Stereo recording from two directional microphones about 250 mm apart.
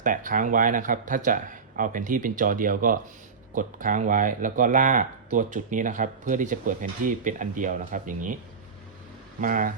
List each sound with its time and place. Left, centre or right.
0.0 s speech: right
9.4 s speech: right